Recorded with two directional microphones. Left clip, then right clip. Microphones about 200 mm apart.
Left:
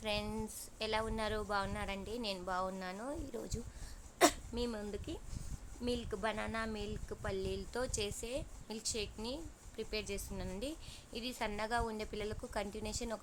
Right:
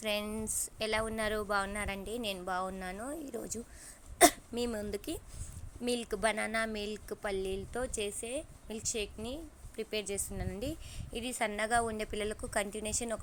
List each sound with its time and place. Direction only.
0.0 s a woman's voice: 15° right (ahead or behind)